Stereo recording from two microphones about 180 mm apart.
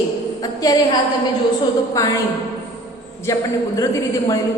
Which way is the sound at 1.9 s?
20° left (ahead or behind).